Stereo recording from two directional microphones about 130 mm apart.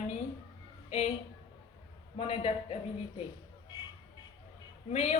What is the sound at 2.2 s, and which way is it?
Speech, 50° left (ahead or behind).